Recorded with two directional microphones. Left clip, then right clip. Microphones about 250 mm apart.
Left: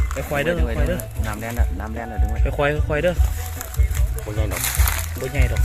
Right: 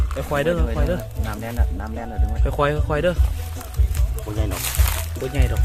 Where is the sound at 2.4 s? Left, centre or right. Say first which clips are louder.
Even; centre.